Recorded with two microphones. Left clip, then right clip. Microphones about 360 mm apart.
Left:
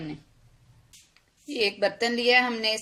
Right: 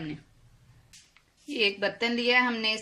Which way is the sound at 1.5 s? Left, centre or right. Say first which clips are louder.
Left 2 dB; left.